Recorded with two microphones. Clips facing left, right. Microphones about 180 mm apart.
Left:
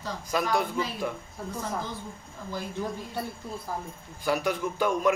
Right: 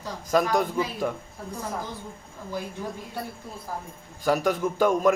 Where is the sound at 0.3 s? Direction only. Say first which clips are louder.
Right 5 dB; 45° right (ahead or behind).